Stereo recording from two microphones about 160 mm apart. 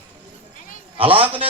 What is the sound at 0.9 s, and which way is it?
Speech, 35° right (ahead or behind).